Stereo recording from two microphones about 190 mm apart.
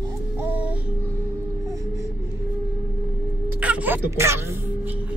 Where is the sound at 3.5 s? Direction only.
5° right (ahead or behind).